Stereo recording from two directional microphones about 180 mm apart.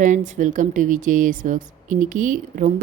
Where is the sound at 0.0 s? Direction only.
45° right (ahead or behind).